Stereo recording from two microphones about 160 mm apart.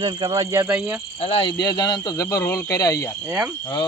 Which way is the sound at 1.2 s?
35° left (ahead or behind).